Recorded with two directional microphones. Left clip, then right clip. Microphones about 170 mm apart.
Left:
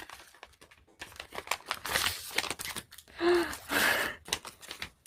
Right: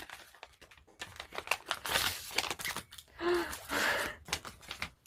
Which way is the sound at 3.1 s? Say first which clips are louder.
Left 5 dB; 40° left (ahead or behind).